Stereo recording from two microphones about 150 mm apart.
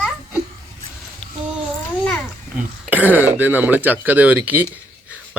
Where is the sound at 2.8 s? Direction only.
10° right (ahead or behind).